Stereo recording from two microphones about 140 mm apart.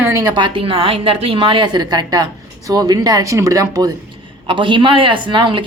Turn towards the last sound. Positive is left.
turn(degrees=-35)  # may be behind; listen again after turning